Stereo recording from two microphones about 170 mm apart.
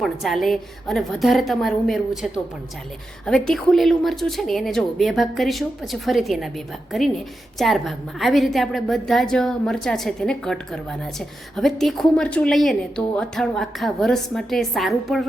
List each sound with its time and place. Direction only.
0.0 s a woman's voice: centre (ahead or behind)